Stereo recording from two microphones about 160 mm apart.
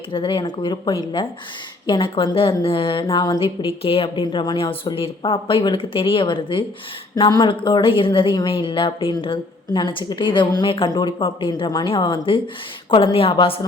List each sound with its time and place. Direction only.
0.1 s a woman's voice: 30° left (ahead or behind)